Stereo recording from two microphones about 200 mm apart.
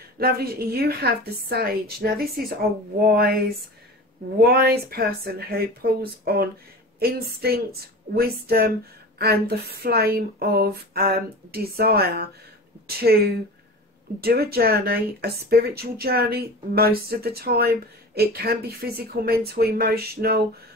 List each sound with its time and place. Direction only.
0.2 s speech: 50° right (ahead or behind)